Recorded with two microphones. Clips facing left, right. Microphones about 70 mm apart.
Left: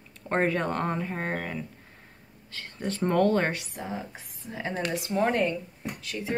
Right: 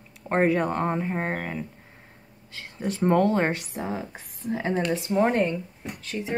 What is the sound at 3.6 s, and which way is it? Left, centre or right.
Speech, right.